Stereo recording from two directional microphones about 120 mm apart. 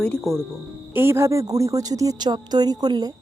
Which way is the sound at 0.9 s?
20° right (ahead or behind).